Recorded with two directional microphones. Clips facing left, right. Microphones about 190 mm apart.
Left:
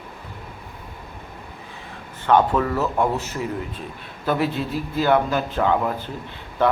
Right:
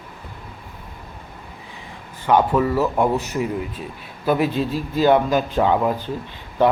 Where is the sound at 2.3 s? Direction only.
10° right (ahead or behind).